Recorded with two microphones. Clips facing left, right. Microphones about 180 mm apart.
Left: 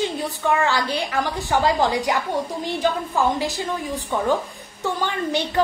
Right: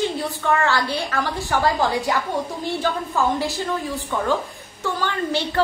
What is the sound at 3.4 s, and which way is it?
Speech, 15° left (ahead or behind).